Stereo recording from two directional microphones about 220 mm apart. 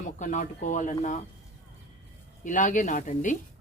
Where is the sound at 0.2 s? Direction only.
35° left (ahead or behind).